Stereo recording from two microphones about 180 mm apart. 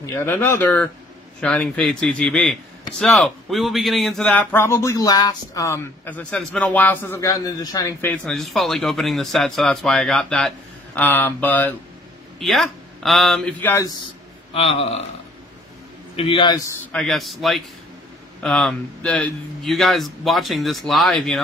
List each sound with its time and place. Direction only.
0.0 s a man's voice: 15° left (ahead or behind)
8.1 s a man's voice: centre (ahead or behind)
14.5 s speech: 35° left (ahead or behind)
16.2 s a man's voice: 30° left (ahead or behind)
16.9 s a man's voice: centre (ahead or behind)